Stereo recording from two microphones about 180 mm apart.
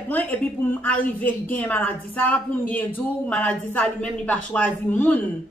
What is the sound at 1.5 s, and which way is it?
A woman's voice, 10° left (ahead or behind).